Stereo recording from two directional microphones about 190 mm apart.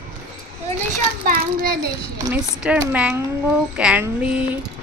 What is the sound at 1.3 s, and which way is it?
Speech, 50° right (ahead or behind).